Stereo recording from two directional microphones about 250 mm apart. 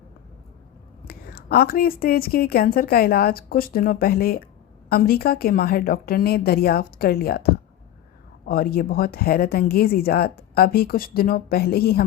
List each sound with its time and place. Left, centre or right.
1.0 s speech: left